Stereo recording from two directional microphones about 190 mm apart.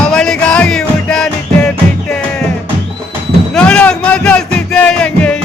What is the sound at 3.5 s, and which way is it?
Music, 5° left (ahead or behind).